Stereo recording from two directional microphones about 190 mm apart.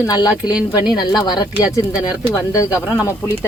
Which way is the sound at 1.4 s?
20° left (ahead or behind).